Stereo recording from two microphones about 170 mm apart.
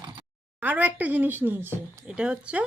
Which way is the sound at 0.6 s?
10° right (ahead or behind).